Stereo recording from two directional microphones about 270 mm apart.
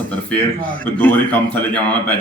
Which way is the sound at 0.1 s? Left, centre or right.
Centre.